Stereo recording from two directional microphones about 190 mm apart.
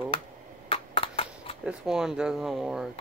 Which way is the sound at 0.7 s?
30° left (ahead or behind).